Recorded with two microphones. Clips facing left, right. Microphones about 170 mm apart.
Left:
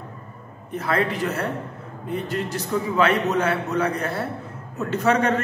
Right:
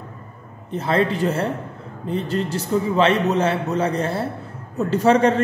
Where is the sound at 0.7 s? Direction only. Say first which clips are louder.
Right 3 dB; 25° right (ahead or behind).